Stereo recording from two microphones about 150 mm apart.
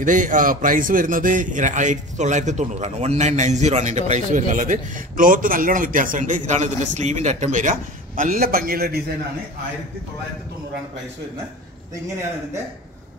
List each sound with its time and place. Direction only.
0.0 s a man's voice: 60° right (ahead or behind)
8.2 s a man's voice: 65° right (ahead or behind); by 9.0 s 90° right